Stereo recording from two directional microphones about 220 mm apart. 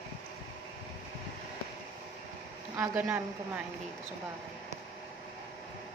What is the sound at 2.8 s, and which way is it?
Speech, 10° right (ahead or behind).